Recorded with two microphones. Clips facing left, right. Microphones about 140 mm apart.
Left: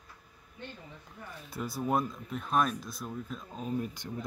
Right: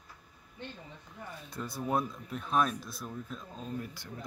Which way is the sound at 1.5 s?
5° left (ahead or behind).